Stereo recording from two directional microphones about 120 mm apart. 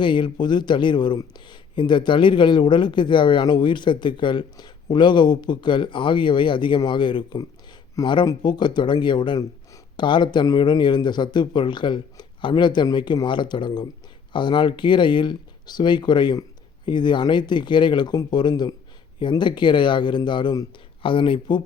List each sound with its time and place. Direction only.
0.0 s speech: 45° left (ahead or behind)